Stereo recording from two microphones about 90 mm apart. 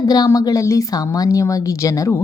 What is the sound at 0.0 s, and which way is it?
A woman's voice, 45° left (ahead or behind).